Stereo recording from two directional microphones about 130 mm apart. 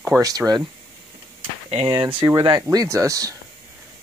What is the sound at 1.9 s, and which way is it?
Speech, 35° right (ahead or behind).